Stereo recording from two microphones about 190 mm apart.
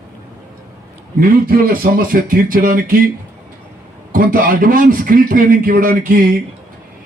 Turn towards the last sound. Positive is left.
turn(degrees=-50)  # may be behind; listen again after turning